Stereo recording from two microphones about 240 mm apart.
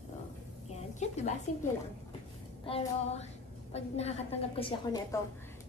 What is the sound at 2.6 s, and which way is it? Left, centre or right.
Music, left.